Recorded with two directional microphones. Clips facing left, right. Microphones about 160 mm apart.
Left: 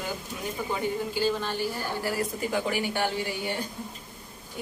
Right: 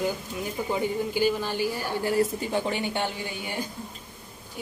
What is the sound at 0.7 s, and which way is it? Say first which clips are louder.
Speech: right 3 dB; 15° right (ahead or behind).